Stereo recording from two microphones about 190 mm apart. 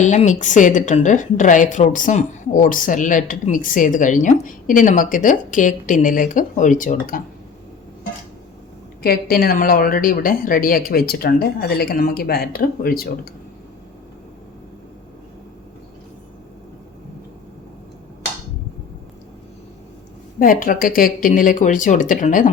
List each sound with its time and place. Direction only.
0.0 s a woman's voice: 40° left (ahead or behind)
9.0 s a woman's voice: 55° left (ahead or behind)
20.4 s a woman's voice: 45° left (ahead or behind)